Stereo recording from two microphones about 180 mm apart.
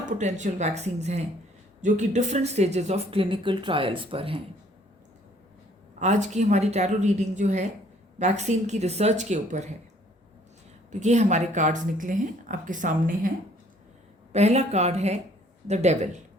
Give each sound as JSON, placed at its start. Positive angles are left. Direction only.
{"t": 0.0, "sound": "speech", "side_deg": -40}
{"t": 6.0, "sound": "speech", "side_deg": -40}
{"t": 11.0, "sound": "a woman's voice", "side_deg": -40}
{"t": 14.3, "sound": "speech", "side_deg": -35}